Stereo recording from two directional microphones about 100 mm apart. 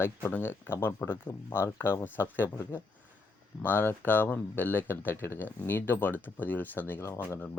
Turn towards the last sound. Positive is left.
turn(degrees=25)  # may be behind; listen again after turning